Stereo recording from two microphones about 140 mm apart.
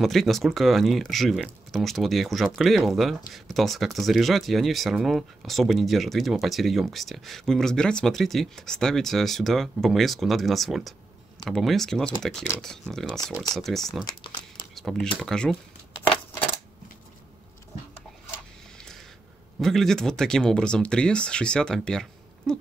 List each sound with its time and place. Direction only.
0.0 s speech: centre (ahead or behind)
14.0 s speech: 30° left (ahead or behind)
14.8 s speech: centre (ahead or behind)
19.6 s speech: centre (ahead or behind)